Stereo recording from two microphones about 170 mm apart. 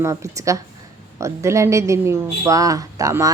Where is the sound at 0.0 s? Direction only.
15° right (ahead or behind).